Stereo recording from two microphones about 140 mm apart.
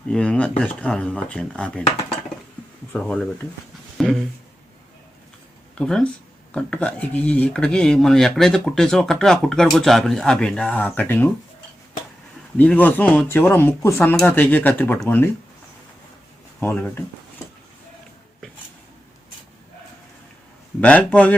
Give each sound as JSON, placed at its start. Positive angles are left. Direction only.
{"t": 0.1, "sound": "speech", "side_deg": 5}
{"t": 2.9, "sound": "speech", "side_deg": 5}
{"t": 3.9, "sound": "a sound", "side_deg": 0}
{"t": 5.7, "sound": "speech", "side_deg": 5}
{"t": 12.5, "sound": "speech", "side_deg": 10}
{"t": 16.6, "sound": "speech", "side_deg": 15}
{"t": 20.8, "sound": "speech", "side_deg": 10}